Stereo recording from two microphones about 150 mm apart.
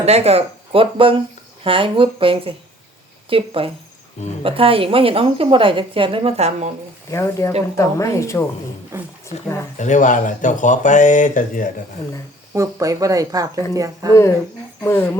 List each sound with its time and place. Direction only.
0.0 s a woman's voice: 45° right (ahead or behind)
7.1 s speech: 20° left (ahead or behind)
9.3 s speech: 45° left (ahead or behind); by 11.7 s 60° left (ahead or behind)
12.5 s speech: 20° right (ahead or behind)
14.1 s speech: 20° left (ahead or behind)